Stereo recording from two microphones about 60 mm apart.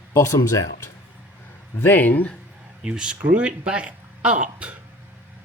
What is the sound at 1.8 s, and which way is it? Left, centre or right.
Speech, left.